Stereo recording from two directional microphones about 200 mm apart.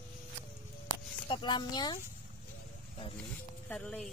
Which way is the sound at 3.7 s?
5° left (ahead or behind).